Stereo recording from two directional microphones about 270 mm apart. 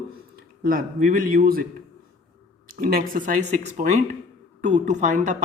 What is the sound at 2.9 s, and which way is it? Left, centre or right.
Speech, right.